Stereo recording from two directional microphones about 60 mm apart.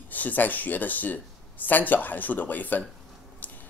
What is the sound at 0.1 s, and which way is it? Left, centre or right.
Speech, left.